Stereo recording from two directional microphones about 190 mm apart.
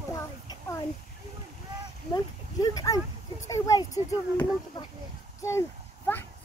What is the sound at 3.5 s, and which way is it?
Child singing, 20° left (ahead or behind).